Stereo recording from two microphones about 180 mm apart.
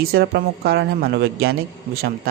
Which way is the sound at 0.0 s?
60° right (ahead or behind).